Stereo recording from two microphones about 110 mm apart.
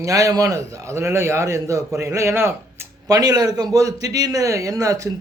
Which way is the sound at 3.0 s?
35° right (ahead or behind).